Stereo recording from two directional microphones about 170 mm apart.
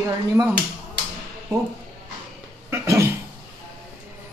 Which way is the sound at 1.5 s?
15° right (ahead or behind).